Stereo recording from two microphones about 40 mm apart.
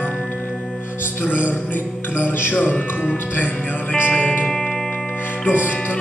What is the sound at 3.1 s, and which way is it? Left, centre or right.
Speech, left.